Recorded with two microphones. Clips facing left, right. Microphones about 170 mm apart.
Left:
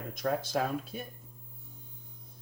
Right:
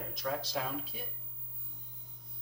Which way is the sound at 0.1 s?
50° left (ahead or behind).